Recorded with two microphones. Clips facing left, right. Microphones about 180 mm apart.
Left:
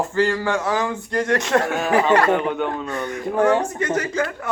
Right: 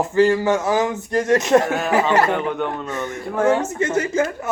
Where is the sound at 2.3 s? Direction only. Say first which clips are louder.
Left 2 dB; centre (ahead or behind).